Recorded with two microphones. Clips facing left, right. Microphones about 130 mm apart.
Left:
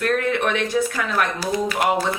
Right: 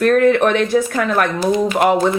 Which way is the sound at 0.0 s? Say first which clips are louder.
Right 9 dB; 50° right (ahead or behind).